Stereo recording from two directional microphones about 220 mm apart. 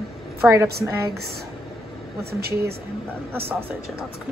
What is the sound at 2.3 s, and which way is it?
Speech, 45° right (ahead or behind).